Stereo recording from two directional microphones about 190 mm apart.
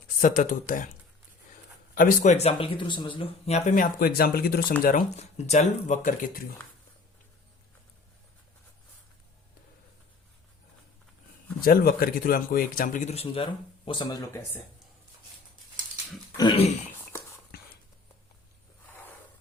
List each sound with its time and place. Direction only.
0.2 s speech: 45° left (ahead or behind)
2.0 s speech: 40° left (ahead or behind)
11.6 s speech: 50° left (ahead or behind); by 14.6 s 15° left (ahead or behind)
16.4 s dog: 30° left (ahead or behind)